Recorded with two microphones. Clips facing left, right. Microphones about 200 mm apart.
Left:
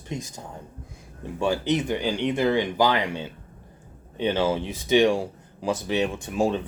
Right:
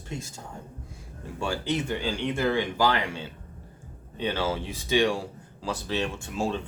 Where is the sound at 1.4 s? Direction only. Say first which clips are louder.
Left 5 dB; 20° left (ahead or behind).